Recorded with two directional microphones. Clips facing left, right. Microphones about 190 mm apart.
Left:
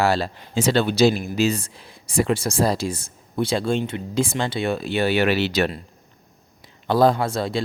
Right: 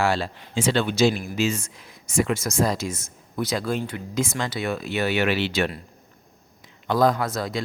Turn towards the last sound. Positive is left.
turn(degrees=30)  # may be behind; listen again after turning